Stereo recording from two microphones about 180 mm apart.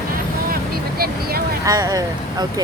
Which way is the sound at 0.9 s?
55° right (ahead or behind).